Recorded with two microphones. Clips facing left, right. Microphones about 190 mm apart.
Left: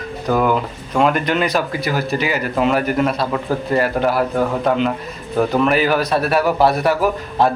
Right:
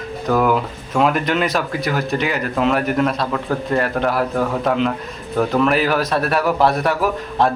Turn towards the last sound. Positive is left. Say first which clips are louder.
# left 1 dB
turn(degrees=0)  # may be behind; listen again after turning